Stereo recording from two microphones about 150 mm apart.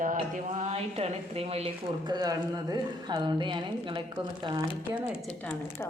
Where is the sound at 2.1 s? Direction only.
25° right (ahead or behind).